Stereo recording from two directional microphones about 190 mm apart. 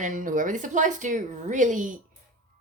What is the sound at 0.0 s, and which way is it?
A woman's voice, 45° right (ahead or behind).